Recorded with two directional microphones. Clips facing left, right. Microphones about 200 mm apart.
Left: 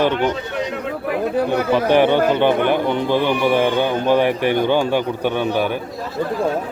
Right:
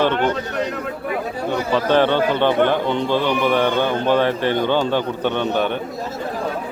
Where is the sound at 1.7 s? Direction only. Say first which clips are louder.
Left 2 dB; 15° left (ahead or behind).